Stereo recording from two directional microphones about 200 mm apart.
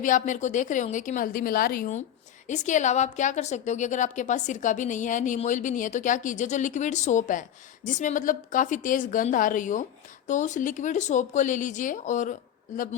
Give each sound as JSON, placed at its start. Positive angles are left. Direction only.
{"t": 0.0, "sound": "a woman's voice", "side_deg": 40}